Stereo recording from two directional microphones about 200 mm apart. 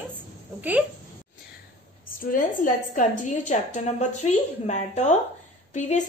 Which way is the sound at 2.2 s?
45° left (ahead or behind).